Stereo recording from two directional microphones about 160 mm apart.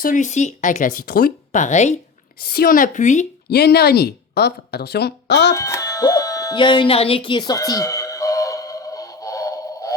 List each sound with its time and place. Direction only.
0.0 s speech: 55° left (ahead or behind); by 1.3 s 70° left (ahead or behind)
1.5 s speech: 50° left (ahead or behind)
2.4 s speech: 70° left (ahead or behind); by 3.2 s 50° left (ahead or behind)
3.5 s a woman's voice: 90° left
5.5 s music: 20° left (ahead or behind)